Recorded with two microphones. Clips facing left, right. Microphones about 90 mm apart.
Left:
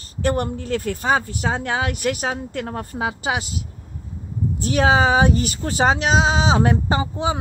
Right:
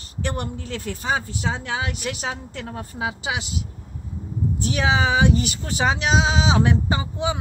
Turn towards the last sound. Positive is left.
turn(degrees=35)  # may be behind; listen again after turning